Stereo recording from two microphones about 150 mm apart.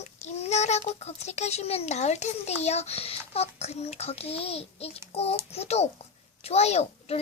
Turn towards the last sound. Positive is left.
turn(degrees=45)  # may be behind; listen again after turning